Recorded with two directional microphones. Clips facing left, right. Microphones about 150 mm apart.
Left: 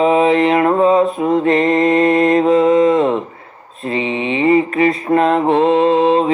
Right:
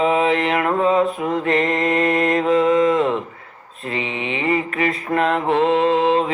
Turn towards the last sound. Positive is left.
turn(degrees=30)  # may be behind; listen again after turning